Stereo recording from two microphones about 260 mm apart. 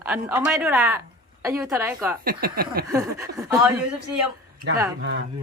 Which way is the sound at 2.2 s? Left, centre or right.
Right.